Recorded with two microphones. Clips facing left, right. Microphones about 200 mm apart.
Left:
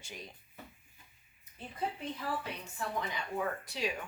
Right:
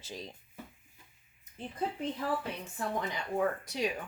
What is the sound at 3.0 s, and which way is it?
Speech, 45° right (ahead or behind).